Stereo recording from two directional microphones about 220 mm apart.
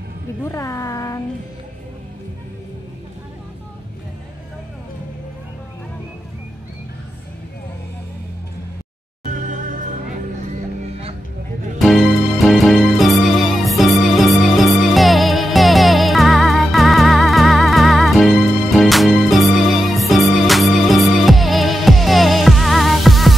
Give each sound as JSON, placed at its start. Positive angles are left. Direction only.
{"t": 0.4, "sound": "speech", "side_deg": 15}
{"t": 9.3, "sound": "music", "side_deg": -35}
{"t": 11.8, "sound": "music", "side_deg": 0}